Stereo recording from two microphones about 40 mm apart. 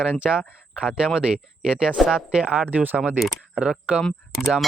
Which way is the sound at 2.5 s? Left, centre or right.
Right.